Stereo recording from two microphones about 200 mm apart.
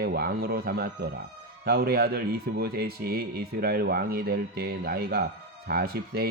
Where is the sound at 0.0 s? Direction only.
50° right (ahead or behind).